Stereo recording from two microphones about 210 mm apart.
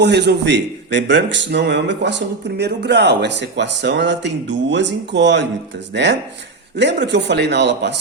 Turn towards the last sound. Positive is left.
turn(degrees=-55)  # may be behind; listen again after turning